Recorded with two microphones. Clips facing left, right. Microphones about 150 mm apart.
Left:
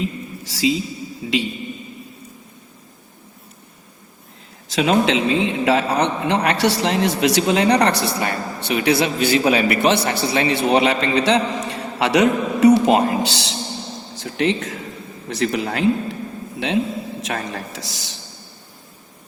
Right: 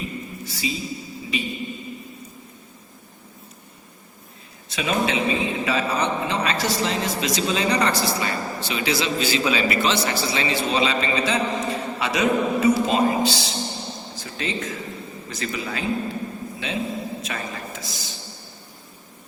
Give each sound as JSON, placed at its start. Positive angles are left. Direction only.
{"t": 0.4, "sound": "a woman's voice", "side_deg": 90}
{"t": 4.7, "sound": "a man's voice", "side_deg": 90}